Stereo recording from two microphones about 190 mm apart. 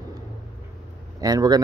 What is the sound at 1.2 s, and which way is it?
Speech, 20° right (ahead or behind).